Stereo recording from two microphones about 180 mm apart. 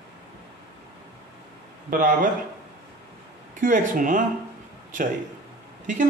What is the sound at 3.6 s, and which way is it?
Stir, 50° right (ahead or behind).